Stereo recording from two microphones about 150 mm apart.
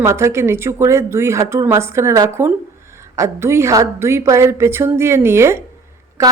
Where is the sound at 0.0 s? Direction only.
20° right (ahead or behind).